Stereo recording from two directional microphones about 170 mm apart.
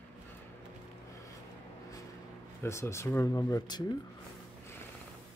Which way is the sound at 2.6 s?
15° left (ahead or behind).